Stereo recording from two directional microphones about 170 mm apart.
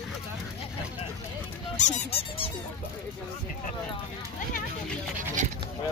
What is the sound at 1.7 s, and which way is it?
Squeak, 45° left (ahead or behind).